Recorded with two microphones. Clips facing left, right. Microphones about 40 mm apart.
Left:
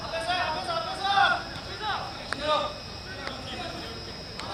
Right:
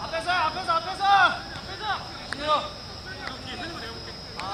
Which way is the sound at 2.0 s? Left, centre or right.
Left.